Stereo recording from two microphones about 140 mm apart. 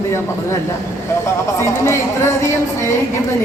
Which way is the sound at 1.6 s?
20° left (ahead or behind).